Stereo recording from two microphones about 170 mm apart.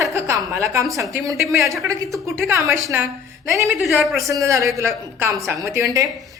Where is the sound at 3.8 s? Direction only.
Centre (ahead or behind).